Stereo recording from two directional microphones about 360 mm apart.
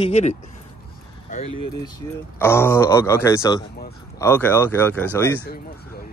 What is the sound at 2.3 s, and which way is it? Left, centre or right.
Speech, centre.